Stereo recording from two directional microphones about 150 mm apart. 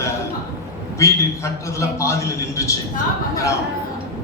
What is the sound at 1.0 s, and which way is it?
A man's voice, 20° left (ahead or behind).